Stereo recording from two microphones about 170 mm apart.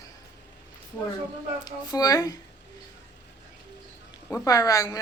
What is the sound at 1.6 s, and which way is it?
Speech, 20° left (ahead or behind).